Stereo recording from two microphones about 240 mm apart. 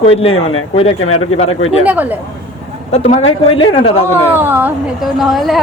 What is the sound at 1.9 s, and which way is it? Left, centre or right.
Speech, centre.